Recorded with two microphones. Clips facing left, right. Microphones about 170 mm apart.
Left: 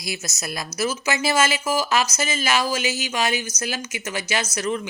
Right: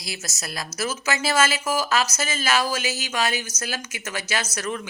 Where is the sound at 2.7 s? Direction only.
45° right (ahead or behind).